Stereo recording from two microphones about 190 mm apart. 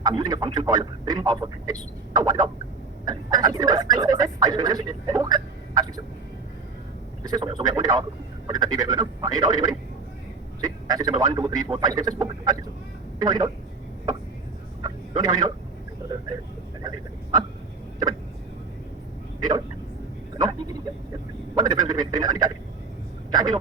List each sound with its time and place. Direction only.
0.0 s speech: 20° right (ahead or behind)
7.3 s speech: 20° right (ahead or behind)
14.8 s fowl: 20° right (ahead or behind)
19.4 s speech: 20° right (ahead or behind)